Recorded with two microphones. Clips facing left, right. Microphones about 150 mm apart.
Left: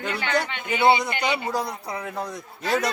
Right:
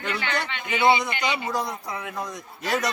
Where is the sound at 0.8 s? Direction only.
35° left (ahead or behind).